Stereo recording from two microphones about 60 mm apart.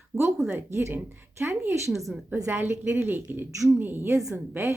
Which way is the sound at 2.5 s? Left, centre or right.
Right.